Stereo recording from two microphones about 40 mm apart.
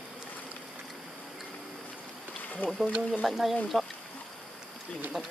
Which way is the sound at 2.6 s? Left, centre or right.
Left.